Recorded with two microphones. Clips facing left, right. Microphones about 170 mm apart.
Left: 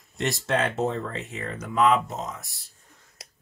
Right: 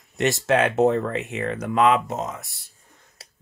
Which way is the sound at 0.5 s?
80° right.